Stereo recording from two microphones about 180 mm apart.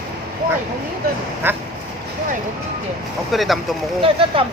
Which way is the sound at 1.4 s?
10° right (ahead or behind).